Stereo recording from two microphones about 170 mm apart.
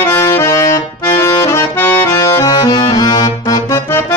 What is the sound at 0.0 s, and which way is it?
Accordion, 15° left (ahead or behind).